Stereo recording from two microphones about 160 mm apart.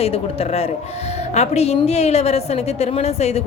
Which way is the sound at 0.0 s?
40° left (ahead or behind).